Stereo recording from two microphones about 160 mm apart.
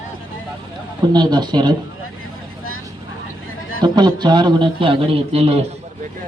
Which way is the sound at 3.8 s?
25° right (ahead or behind).